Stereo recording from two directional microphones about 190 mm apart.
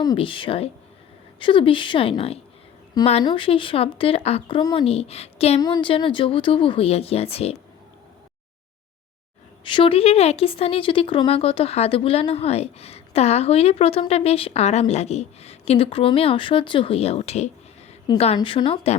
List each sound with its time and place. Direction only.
0.0 s speech: 25° left (ahead or behind)
5.5 s speech: 20° left (ahead or behind)
9.6 s speech: 25° left (ahead or behind)